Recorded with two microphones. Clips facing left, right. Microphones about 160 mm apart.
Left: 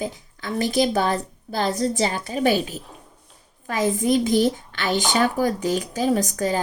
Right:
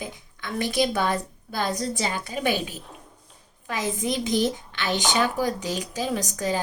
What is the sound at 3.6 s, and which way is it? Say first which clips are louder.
Speech: left 6 dB; 50° left (ahead or behind).